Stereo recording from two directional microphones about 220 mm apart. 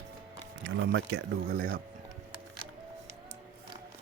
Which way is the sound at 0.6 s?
55° right (ahead or behind).